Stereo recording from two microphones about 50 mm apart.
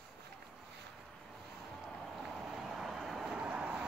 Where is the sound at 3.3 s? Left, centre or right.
Right.